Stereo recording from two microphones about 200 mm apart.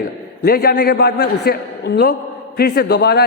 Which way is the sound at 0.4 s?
50° left (ahead or behind).